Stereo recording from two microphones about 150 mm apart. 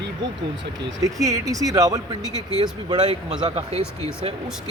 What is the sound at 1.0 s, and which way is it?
Speech, 20° right (ahead or behind).